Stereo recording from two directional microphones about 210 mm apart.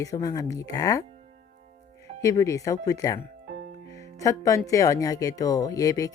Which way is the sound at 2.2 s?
15° left (ahead or behind).